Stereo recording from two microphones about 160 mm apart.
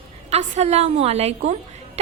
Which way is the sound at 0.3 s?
45° right (ahead or behind).